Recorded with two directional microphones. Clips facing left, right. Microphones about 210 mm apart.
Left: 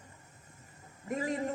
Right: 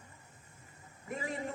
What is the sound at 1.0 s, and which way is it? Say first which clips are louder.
Speech: left 5 dB; 40° left (ahead or behind).